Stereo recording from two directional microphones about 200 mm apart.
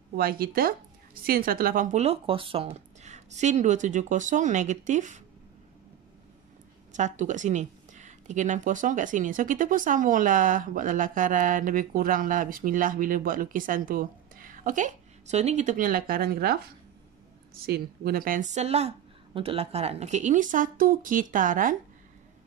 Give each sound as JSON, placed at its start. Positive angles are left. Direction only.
{"t": 0.1, "sound": "a woman's voice", "side_deg": -45}
{"t": 6.9, "sound": "a woman's voice", "side_deg": -35}
{"t": 17.6, "sound": "a woman's voice", "side_deg": -50}